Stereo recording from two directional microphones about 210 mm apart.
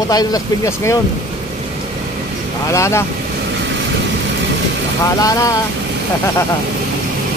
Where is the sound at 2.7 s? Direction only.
15° left (ahead or behind).